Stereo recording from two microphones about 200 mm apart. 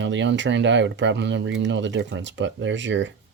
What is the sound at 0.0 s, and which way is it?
Speech, 65° right (ahead or behind).